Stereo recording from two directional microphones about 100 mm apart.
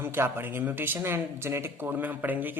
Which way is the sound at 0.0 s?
20° right (ahead or behind).